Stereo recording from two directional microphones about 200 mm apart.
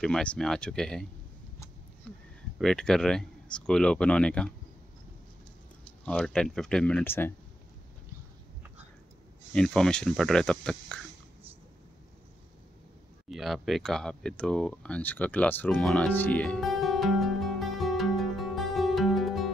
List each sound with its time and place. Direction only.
0.0 s speech: 5° left (ahead or behind)
2.1 s a sound: 5° left (ahead or behind)
2.6 s speech: centre (ahead or behind)
6.0 s speech: 5° left (ahead or behind)
9.5 s speech: 5° left (ahead or behind)
13.3 s a sound: centre (ahead or behind)